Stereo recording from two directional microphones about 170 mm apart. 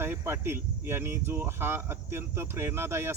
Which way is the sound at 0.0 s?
15° right (ahead or behind).